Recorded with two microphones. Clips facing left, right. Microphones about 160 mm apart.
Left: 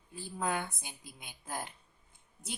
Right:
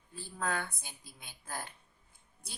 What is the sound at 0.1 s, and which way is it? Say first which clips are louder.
A woman's voice: left 2 dB; 15° left (ahead or behind).